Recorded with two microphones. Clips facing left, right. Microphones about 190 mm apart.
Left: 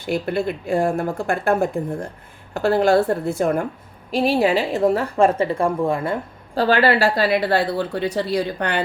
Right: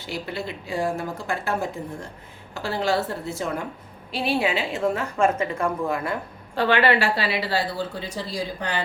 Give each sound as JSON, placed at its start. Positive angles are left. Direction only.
{"t": 0.0, "sound": "speech", "side_deg": 55}
{"t": 4.1, "sound": "a woman's voice", "side_deg": 40}